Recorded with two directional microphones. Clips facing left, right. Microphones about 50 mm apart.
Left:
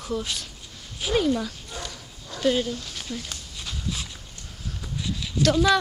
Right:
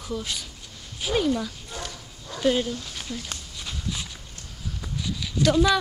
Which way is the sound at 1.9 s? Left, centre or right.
Centre.